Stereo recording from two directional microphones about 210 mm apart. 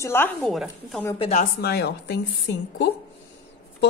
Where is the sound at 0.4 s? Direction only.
Centre (ahead or behind).